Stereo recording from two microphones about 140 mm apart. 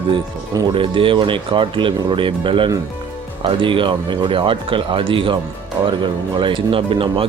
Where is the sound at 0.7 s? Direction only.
40° right (ahead or behind).